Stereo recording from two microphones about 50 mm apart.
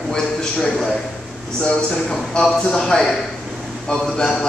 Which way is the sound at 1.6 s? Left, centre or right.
Left.